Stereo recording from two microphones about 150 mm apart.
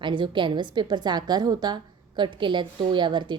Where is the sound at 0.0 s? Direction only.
30° right (ahead or behind).